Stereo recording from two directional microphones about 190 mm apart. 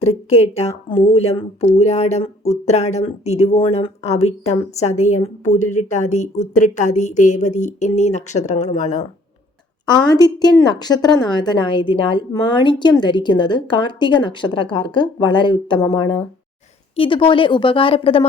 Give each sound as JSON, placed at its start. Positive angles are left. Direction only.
{"t": 0.0, "sound": "speech", "side_deg": 35}
{"t": 9.9, "sound": "a woman's voice", "side_deg": 20}